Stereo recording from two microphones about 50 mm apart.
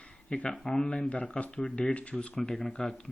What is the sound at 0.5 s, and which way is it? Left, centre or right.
Speech, centre.